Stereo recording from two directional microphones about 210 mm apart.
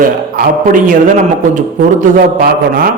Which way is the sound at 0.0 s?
40° right (ahead or behind).